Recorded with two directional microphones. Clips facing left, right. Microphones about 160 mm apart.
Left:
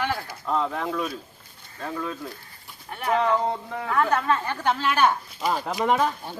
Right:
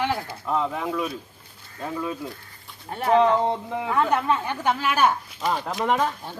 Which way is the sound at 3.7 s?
20° right (ahead or behind).